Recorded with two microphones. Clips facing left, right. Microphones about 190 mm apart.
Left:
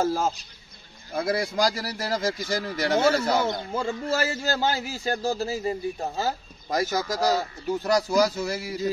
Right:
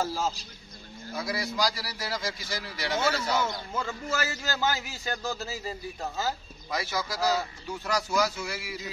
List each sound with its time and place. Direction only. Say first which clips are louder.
0.0 s speech: left 5 dB; 50° left (ahead or behind)
3.7 s a man's voice: left 5 dB; 30° left (ahead or behind)
6.7 s speech: left 6 dB; 45° left (ahead or behind)